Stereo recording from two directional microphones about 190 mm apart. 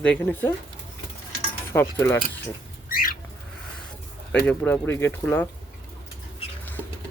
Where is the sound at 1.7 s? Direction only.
10° left (ahead or behind).